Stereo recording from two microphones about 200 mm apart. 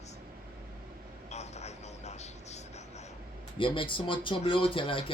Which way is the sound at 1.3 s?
35° left (ahead or behind).